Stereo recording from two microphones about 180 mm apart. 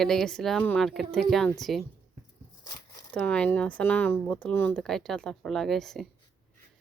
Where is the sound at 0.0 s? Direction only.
Centre (ahead or behind).